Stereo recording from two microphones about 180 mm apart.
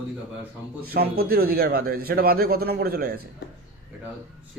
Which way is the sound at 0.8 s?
55° right (ahead or behind).